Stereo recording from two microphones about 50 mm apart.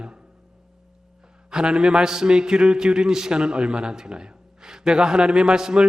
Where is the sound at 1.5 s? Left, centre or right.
Centre.